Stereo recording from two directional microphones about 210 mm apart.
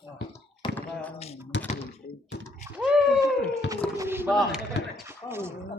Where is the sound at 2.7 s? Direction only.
5° right (ahead or behind).